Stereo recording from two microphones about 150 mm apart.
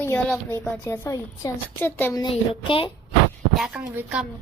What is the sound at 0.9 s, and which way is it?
A woman's voice, 15° left (ahead or behind).